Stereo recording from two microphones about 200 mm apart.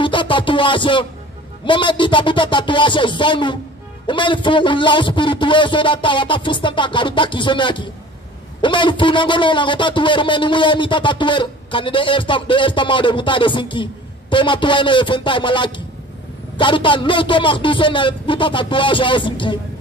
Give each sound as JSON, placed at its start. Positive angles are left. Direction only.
{"t": 0.0, "sound": "a man's voice", "side_deg": 25}